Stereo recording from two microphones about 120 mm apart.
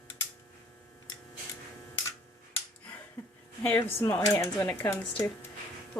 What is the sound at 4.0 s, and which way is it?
Speech, 20° left (ahead or behind).